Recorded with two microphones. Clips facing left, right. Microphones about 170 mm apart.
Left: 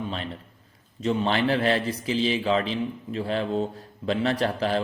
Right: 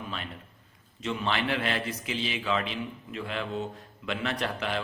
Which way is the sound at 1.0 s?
35° left (ahead or behind).